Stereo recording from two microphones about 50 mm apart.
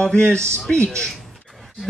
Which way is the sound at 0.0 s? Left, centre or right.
Centre.